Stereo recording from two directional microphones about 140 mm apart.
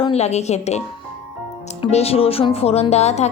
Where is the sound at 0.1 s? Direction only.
50° left (ahead or behind).